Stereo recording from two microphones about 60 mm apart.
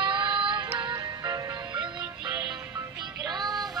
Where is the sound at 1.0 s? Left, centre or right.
Right.